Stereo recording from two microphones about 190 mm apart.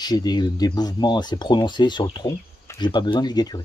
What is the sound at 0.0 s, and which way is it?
Speech, 20° left (ahead or behind).